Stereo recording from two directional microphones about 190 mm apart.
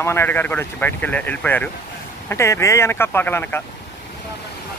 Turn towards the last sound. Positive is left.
turn(degrees=10)  # may be behind; listen again after turning